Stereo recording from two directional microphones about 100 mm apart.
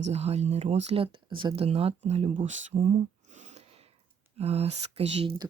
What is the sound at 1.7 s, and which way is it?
Speech, 85° right.